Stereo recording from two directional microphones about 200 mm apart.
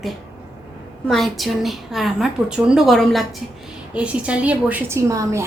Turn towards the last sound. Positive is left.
turn(degrees=-15)  # may be behind; listen again after turning